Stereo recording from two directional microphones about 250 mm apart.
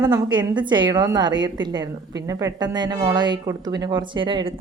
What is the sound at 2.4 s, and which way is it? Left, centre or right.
Speech, centre.